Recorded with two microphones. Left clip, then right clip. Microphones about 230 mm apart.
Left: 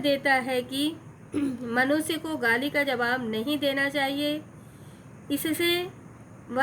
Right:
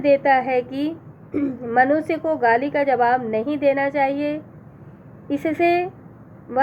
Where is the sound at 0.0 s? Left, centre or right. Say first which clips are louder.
Right 8 dB; left.